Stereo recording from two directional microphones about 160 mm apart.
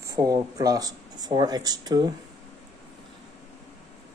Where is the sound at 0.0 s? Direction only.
20° right (ahead or behind).